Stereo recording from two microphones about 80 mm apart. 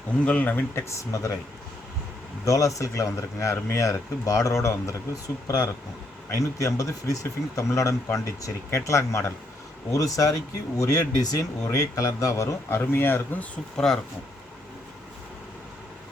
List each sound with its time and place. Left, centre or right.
0.3 s speech: centre
0.9 s speech: left
2.4 s speech: left
13.7 s speech: centre